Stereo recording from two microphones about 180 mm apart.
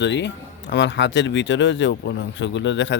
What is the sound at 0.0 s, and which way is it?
Speech, 80° left.